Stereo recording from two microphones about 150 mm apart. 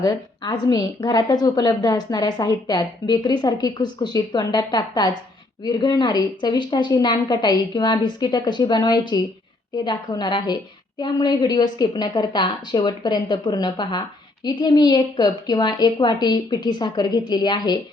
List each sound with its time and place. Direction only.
0.0 s a woman's voice: 25° left (ahead or behind)